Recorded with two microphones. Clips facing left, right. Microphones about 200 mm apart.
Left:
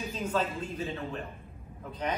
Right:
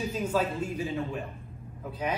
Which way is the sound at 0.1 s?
10° right (ahead or behind).